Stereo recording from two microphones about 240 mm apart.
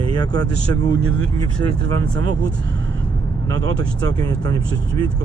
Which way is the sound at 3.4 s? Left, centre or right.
Centre.